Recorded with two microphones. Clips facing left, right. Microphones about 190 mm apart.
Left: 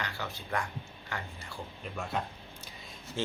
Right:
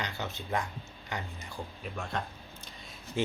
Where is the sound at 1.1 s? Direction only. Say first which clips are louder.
Right 2 dB; 20° right (ahead or behind).